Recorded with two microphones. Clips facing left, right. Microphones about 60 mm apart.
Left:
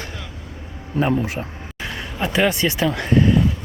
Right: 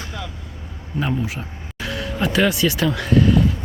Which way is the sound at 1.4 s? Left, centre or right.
Left.